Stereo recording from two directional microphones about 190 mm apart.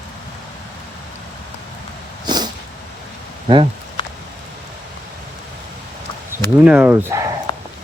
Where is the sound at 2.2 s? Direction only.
20° right (ahead or behind).